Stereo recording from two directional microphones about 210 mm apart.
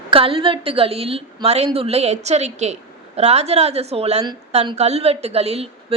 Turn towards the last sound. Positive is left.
turn(degrees=-30)  # may be behind; listen again after turning